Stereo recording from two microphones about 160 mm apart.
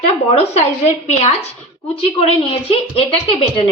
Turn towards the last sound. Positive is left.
turn(degrees=35)  # may be behind; listen again after turning